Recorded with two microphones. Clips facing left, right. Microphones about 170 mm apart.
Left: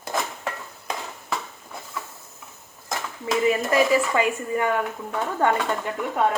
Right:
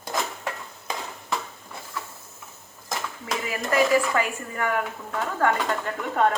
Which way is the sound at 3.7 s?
20° left (ahead or behind).